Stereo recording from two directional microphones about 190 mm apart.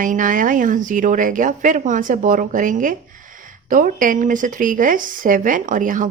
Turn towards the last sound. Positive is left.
turn(degrees=-45)  # may be behind; listen again after turning